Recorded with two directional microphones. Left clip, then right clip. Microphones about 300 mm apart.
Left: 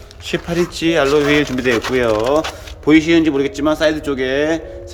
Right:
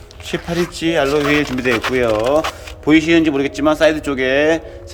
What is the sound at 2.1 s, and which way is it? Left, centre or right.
Speech, centre.